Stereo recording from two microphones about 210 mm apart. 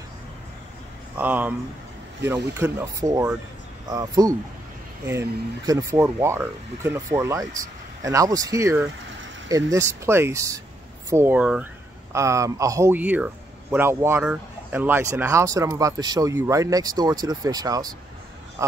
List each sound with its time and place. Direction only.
1.1 s speech: 10° right (ahead or behind)
5.7 s speech: 15° right (ahead or behind)